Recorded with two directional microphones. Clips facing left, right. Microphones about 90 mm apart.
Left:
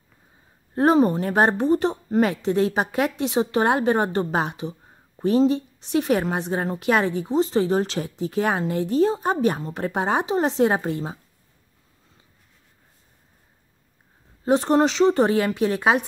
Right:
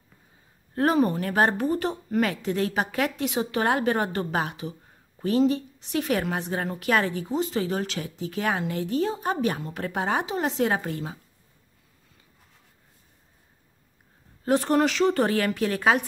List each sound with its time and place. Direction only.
0.7 s a woman's voice: 25° left (ahead or behind)
14.4 s a woman's voice: 20° left (ahead or behind)